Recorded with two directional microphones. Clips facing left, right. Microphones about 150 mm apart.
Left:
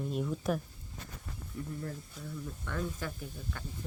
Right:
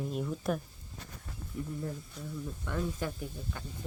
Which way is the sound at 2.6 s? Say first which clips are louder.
Right 3 dB; 15° right (ahead or behind).